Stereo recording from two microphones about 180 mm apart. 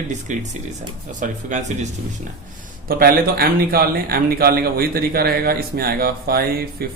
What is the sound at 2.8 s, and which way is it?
Speech, 55° right (ahead or behind).